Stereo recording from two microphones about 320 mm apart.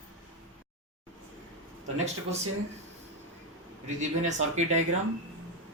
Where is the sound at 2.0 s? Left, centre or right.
Centre.